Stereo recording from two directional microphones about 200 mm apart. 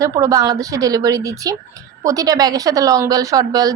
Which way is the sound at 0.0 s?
15° right (ahead or behind).